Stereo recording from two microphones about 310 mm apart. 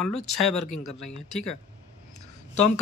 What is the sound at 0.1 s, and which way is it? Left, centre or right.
Speech, left.